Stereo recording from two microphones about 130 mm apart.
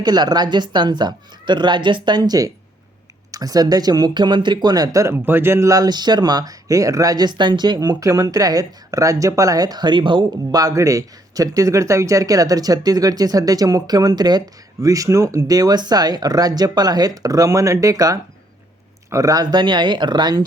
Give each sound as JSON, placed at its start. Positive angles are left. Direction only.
{"t": 0.0, "sound": "speech", "side_deg": -30}